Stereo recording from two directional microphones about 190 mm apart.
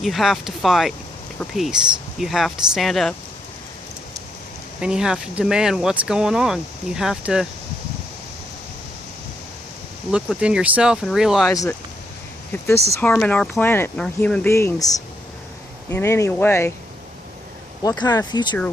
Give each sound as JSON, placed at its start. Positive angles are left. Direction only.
{"t": 0.0, "sound": "speech", "side_deg": 0}
{"t": 4.8, "sound": "speech", "side_deg": -5}
{"t": 10.1, "sound": "speech", "side_deg": -5}
{"t": 12.6, "sound": "speech", "side_deg": 15}
{"t": 17.8, "sound": "speech", "side_deg": 20}